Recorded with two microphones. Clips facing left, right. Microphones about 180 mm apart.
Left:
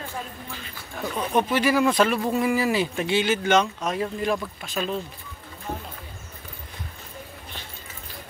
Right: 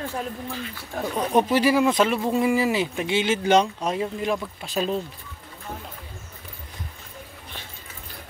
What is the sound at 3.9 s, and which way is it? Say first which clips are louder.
Speech: left 1 dB; 20° right (ahead or behind).